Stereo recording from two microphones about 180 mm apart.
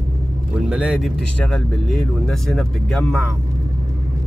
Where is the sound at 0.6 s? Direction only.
5° right (ahead or behind).